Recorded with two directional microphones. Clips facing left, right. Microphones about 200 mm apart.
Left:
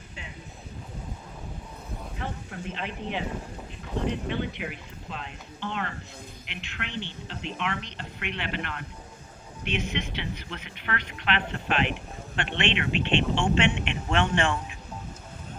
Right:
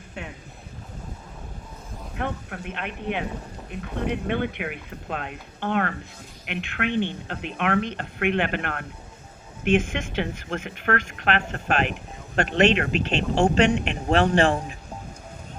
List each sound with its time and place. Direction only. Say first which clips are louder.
0.2 s vehicle: right 9 dB; 60° right (ahead or behind)
2.1 s speech: right 7 dB; 60° right (ahead or behind); by 14.8 s 35° right (ahead or behind)